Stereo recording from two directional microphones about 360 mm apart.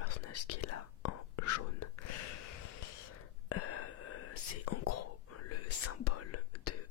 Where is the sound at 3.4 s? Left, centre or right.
Left.